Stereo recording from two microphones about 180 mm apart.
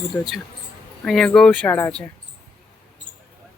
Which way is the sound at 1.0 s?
Centre (ahead or behind).